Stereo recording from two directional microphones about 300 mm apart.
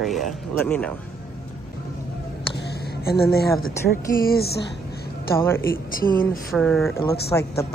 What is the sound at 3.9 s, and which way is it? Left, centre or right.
Speech, left.